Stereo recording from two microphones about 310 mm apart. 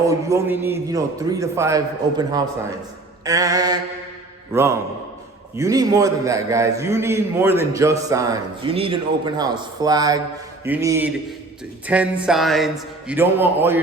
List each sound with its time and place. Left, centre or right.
0.1 s a man's voice: centre